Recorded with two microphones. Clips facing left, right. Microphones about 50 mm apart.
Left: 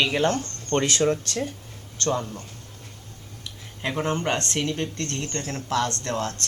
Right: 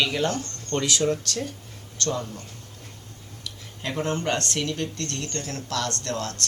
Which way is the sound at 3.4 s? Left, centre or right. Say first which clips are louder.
Left 3 dB; left.